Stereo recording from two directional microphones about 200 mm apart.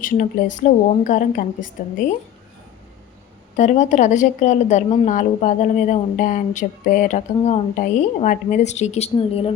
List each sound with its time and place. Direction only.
0.0 s a woman's voice: 40° left (ahead or behind)
3.6 s a woman's voice: 40° left (ahead or behind)